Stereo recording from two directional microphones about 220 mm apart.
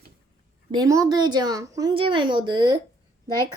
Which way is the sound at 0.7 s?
15° right (ahead or behind).